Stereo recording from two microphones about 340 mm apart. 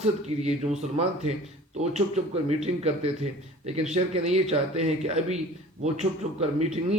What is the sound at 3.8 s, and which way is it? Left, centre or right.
A man's voice, centre.